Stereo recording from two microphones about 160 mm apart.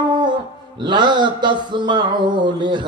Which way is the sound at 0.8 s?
30° right (ahead or behind).